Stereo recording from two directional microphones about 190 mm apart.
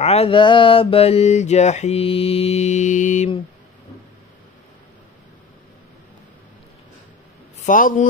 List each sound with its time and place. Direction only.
0.0 s mantra: 30° left (ahead or behind)
7.5 s a man's voice: 45° left (ahead or behind)